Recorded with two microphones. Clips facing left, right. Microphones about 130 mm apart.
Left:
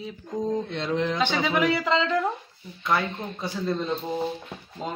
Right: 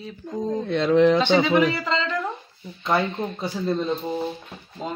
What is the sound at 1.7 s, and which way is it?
Speech, 15° left (ahead or behind).